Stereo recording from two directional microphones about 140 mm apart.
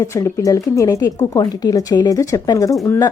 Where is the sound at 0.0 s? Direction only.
20° left (ahead or behind).